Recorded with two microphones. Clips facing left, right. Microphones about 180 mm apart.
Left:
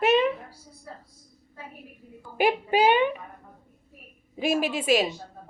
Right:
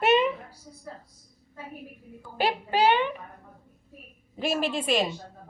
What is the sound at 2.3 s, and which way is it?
Speech, 15° left (ahead or behind).